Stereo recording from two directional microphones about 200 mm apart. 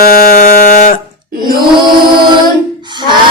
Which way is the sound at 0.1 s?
45° left (ahead or behind).